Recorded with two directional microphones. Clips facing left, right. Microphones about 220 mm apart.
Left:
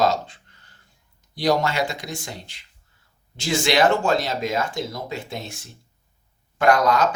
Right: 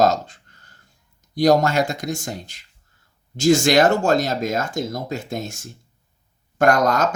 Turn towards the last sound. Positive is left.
turn(degrees=-45)  # may be behind; listen again after turning